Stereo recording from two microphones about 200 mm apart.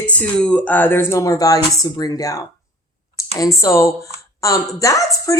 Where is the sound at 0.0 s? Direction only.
5° left (ahead or behind).